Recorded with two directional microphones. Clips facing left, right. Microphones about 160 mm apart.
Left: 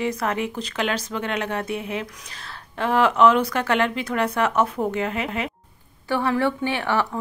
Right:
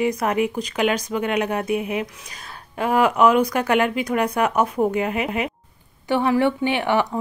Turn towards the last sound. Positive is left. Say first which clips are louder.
# right 3 dB
turn(degrees=-15)  # may be behind; listen again after turning